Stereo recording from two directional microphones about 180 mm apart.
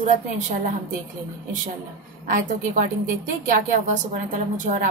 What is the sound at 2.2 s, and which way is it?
A woman's voice, 45° right (ahead or behind).